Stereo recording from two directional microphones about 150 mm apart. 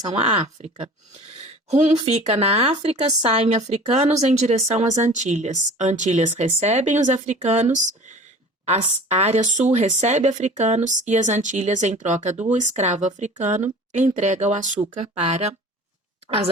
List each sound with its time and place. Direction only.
0.2 s speech: 45° right (ahead or behind); by 3.2 s 30° right (ahead or behind)
3.2 s speech: 40° right (ahead or behind)